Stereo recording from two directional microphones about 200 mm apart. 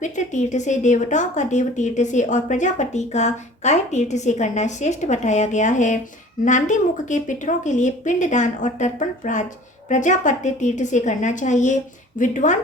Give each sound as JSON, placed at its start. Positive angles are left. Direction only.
{"t": 0.0, "sound": "speech", "side_deg": 35}